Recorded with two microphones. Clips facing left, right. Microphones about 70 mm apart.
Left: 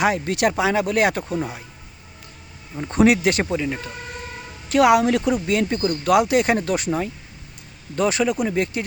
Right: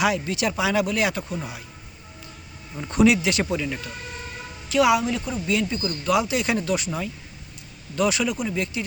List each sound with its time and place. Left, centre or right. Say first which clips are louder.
0.0 s speech: left 2 dB; left
0.3 s speech: left 5 dB; left
0.6 s speech: left 1 dB; left
1.3 s speech: left 6 dB; left
2.9 s speech: left 2 dB; left
3.5 s speech: left 3 dB; left
4.7 s speech: left 4 dB; left
5.5 s speech: left 4 dB; left